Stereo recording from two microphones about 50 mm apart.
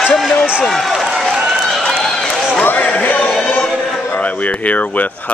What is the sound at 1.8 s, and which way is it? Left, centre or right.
Run, centre.